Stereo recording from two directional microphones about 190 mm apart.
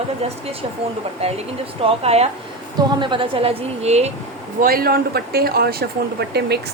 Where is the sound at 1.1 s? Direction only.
30° right (ahead or behind).